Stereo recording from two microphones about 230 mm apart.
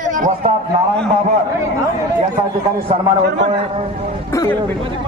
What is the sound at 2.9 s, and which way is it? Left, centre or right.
Speech, right.